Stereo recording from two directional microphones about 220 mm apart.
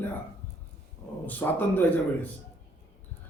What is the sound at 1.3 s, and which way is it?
Speech, 10° left (ahead or behind).